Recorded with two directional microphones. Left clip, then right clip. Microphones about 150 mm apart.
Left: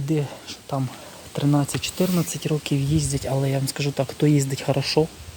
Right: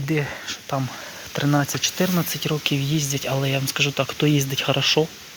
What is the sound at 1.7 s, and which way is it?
Speech, 15° left (ahead or behind).